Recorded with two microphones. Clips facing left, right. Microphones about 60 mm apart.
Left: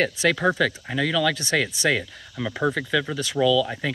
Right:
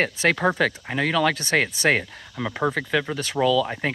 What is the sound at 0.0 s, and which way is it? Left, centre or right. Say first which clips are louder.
Speech: even; right.